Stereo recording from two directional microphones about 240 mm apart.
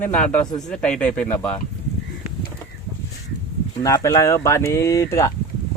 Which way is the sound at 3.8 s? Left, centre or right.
Centre.